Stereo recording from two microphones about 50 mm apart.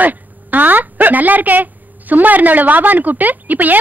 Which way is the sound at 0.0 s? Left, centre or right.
Right.